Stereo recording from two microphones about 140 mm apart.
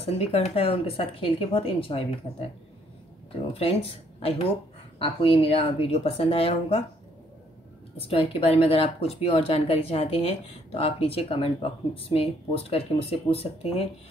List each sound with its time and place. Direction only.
0.0 s speech: 45° left (ahead or behind)
3.5 s speech: 45° left (ahead or behind)
8.1 s speech: 40° left (ahead or behind)